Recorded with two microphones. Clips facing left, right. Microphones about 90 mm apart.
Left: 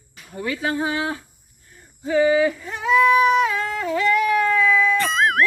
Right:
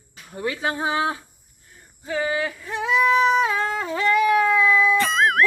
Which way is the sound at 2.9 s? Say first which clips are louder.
Left 3 dB; 15° right (ahead or behind).